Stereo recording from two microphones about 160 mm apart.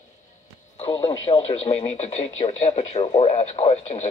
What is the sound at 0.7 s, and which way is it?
Music, 35° left (ahead or behind).